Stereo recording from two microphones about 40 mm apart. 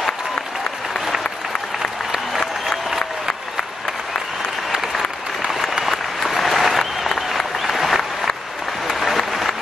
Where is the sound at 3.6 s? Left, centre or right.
Centre.